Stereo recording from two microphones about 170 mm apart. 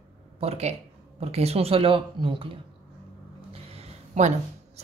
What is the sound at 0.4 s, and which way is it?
A woman's voice, 40° right (ahead or behind).